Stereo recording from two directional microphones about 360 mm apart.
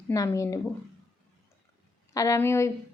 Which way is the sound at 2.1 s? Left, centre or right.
Centre.